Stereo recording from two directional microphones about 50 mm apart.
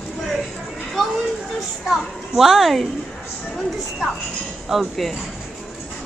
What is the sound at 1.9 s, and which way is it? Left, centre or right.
A woman's voice, centre.